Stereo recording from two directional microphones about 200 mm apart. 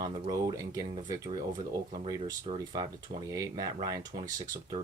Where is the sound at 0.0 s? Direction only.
20° right (ahead or behind).